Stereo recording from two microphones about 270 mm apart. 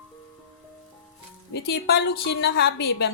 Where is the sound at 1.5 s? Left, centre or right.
Left.